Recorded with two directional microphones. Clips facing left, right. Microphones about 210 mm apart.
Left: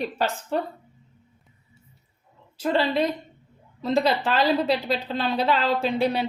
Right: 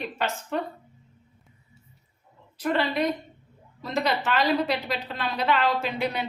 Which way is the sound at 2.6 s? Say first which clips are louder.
Left 3 dB; 25° left (ahead or behind).